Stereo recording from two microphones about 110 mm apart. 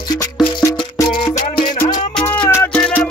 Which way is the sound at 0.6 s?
30° left (ahead or behind).